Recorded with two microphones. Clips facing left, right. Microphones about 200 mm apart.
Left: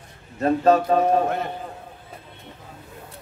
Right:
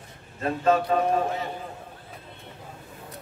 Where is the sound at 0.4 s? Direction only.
40° left (ahead or behind).